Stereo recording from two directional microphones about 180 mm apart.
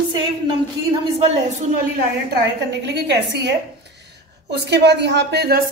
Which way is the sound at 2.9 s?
70° right (ahead or behind).